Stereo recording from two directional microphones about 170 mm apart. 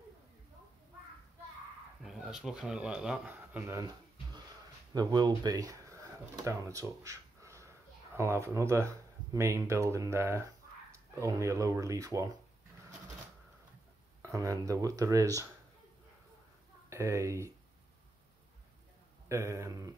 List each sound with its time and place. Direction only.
2.0 s speech: centre (ahead or behind); by 12.3 s 20° right (ahead or behind)
14.2 s speech: 20° right (ahead or behind)
16.9 s speech: 15° right (ahead or behind)
19.2 s speech: 15° right (ahead or behind)